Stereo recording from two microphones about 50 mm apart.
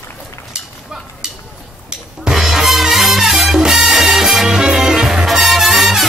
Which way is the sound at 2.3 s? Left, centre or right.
Centre.